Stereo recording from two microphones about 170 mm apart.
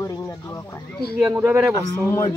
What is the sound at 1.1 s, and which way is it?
Speech, 10° right (ahead or behind).